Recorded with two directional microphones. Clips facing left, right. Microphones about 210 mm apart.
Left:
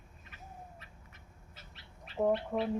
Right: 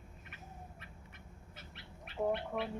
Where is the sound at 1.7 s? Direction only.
60° right (ahead or behind).